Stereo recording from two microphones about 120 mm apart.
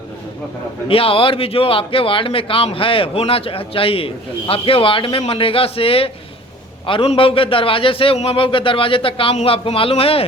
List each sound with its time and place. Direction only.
0.9 s speech: 50° left (ahead or behind)